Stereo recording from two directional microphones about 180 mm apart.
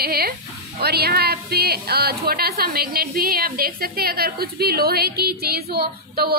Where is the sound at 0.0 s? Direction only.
60° right (ahead or behind).